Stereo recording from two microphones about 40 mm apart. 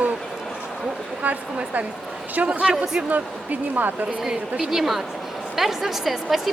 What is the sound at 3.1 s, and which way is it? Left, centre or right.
Speech, right.